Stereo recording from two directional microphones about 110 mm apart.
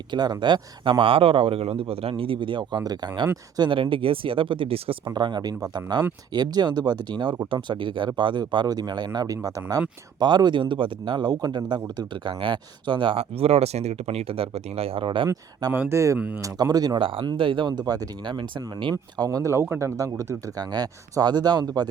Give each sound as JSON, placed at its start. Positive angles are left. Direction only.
{"t": 0.1, "sound": "speech", "side_deg": -40}
{"t": 3.6, "sound": "speech", "side_deg": -50}
{"t": 5.0, "sound": "speech", "side_deg": -40}
{"t": 13.1, "sound": "speech", "side_deg": -65}
{"t": 15.7, "sound": "speech", "side_deg": -20}
{"t": 16.1, "sound": "speech", "side_deg": -10}
{"t": 16.4, "sound": "speech", "side_deg": -35}
{"t": 17.0, "sound": "speech", "side_deg": -50}
{"t": 20.0, "sound": "speech", "side_deg": -30}